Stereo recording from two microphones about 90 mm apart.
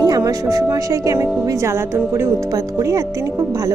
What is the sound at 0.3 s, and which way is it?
Speech, 40° right (ahead or behind).